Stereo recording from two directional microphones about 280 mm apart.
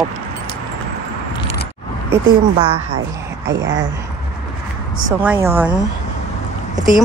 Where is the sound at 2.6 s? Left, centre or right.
Right.